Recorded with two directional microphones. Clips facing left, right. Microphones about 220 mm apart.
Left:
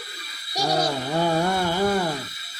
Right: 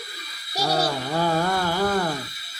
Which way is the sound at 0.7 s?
15° left (ahead or behind).